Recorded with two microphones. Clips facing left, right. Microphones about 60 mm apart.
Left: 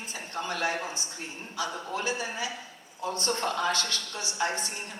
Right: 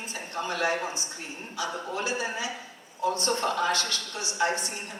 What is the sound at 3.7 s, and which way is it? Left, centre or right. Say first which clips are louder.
Speech: right 1 dB; right.